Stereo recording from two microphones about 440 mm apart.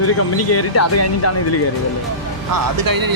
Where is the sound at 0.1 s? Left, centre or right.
Left.